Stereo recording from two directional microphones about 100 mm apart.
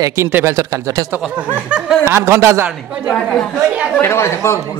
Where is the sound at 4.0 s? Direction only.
25° left (ahead or behind).